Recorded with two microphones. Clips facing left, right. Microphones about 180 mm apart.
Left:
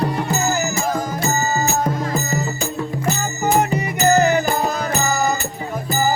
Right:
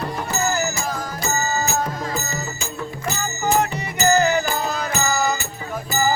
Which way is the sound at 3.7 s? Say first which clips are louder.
Left 3 dB; 50° left (ahead or behind).